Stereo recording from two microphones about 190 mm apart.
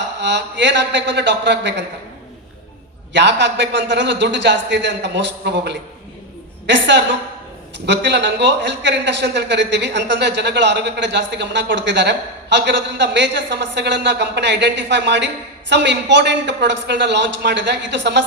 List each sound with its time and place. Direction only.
0.2 s a man's voice: 65° right (ahead or behind)
3.1 s a man's voice: 65° right (ahead or behind)